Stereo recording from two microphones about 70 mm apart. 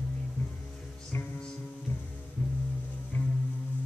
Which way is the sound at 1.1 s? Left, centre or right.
Left.